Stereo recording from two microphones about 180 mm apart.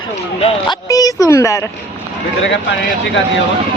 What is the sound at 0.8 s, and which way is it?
Speech, 20° left (ahead or behind).